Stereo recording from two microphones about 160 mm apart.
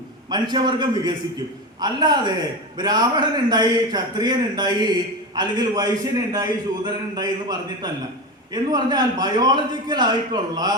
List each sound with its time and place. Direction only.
0.3 s a man's voice: 25° right (ahead or behind)